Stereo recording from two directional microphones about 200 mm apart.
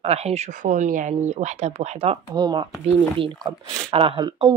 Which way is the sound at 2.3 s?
20° right (ahead or behind).